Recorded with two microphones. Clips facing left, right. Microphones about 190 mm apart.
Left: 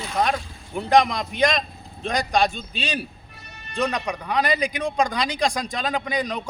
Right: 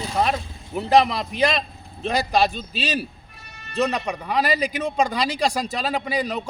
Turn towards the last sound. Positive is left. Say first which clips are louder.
# right 1 dB
turn(degrees=-5)  # may be behind; listen again after turning